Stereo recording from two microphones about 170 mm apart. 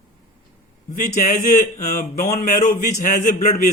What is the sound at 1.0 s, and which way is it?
Speech, 50° left (ahead or behind).